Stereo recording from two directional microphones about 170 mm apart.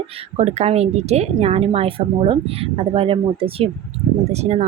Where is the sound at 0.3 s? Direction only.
40° right (ahead or behind).